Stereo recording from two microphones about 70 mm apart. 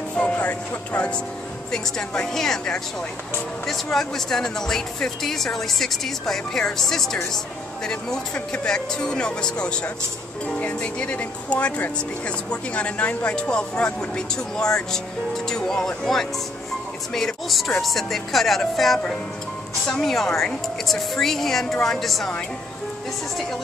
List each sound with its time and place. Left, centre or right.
0.1 s music: centre
1.7 s speech: centre